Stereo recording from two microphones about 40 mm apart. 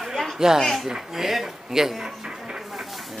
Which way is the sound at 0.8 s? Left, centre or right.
Centre.